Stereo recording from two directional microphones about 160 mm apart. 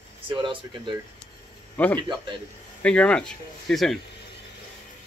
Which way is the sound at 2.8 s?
5° left (ahead or behind).